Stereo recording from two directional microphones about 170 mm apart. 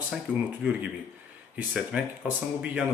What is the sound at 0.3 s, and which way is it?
Speech, 10° right (ahead or behind).